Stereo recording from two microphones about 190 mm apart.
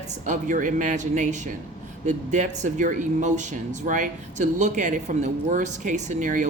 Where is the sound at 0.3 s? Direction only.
40° right (ahead or behind).